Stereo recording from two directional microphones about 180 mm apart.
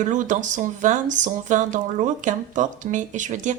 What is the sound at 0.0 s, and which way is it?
Speech, 45° right (ahead or behind).